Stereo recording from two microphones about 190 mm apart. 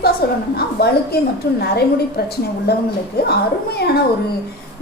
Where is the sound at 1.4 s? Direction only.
60° left (ahead or behind).